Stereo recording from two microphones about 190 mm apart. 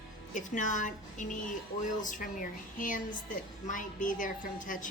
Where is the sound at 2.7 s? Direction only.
45° left (ahead or behind).